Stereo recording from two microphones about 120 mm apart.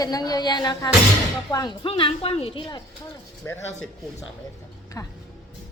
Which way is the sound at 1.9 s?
50° left (ahead or behind).